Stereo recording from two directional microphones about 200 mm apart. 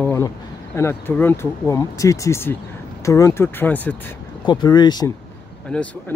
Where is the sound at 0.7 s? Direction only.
10° left (ahead or behind).